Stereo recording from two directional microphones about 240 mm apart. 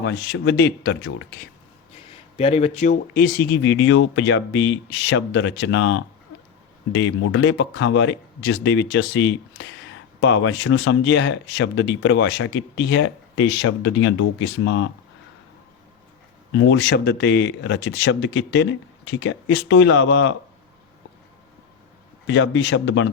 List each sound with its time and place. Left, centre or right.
0.0 s speech: left
2.0 s speech: left
16.5 s speech: left
22.3 s speech: left